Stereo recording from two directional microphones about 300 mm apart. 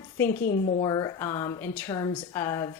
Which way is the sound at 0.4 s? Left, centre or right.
Left.